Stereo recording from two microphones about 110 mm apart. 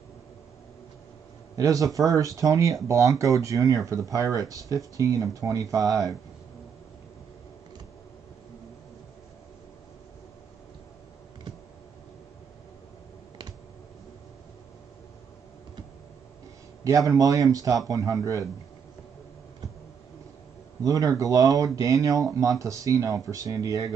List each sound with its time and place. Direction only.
1.6 s speech: 30° right (ahead or behind)
16.8 s speech: 30° right (ahead or behind)
20.8 s speech: 30° right (ahead or behind)